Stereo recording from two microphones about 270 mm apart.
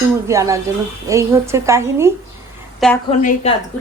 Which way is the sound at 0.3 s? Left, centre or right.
Centre.